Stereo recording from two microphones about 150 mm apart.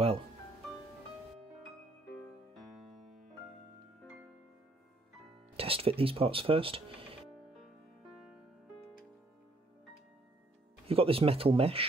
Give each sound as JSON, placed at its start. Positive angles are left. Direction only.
{"t": 2.5, "sound": "music", "side_deg": 0}
{"t": 5.6, "sound": "speech", "side_deg": -40}
{"t": 8.1, "sound": "music", "side_deg": 0}
{"t": 10.9, "sound": "speech", "side_deg": -40}